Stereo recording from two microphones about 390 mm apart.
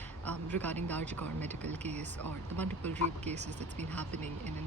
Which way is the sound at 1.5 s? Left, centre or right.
Centre.